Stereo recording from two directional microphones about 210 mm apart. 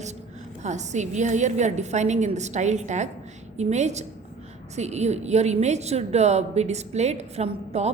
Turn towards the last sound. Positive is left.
turn(degrees=-30)  # may be behind; listen again after turning